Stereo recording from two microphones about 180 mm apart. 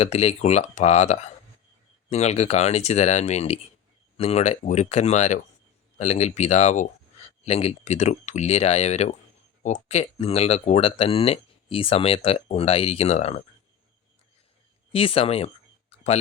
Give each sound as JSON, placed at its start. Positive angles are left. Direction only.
{"t": 0.0, "sound": "speech", "side_deg": 35}
{"t": 14.9, "sound": "speech", "side_deg": 30}